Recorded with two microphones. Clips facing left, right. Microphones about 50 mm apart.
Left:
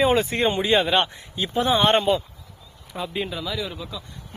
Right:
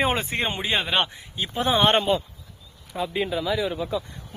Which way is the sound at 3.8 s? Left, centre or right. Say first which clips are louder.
Right 8 dB; right.